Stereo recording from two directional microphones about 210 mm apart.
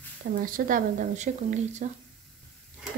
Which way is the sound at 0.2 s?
40° right (ahead or behind).